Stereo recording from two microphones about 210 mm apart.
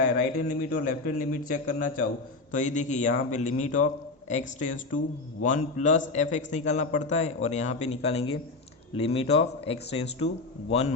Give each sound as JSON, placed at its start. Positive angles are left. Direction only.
{"t": 0.0, "sound": "a man's voice", "side_deg": 45}